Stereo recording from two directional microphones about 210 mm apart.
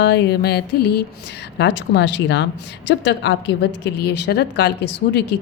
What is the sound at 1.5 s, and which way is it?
Speech, 55° left (ahead or behind).